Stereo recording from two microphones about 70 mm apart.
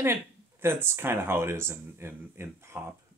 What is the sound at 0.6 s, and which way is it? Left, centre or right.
Speech, right.